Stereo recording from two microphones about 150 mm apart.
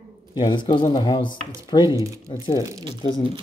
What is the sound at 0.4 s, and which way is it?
Speech, 30° left (ahead or behind).